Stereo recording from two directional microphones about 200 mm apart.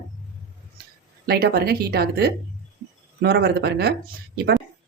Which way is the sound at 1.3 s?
50° right (ahead or behind).